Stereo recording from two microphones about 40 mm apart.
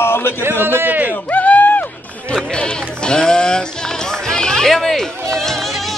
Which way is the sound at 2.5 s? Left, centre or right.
Left.